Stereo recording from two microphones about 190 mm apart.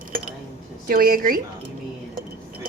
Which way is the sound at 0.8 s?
50° right (ahead or behind).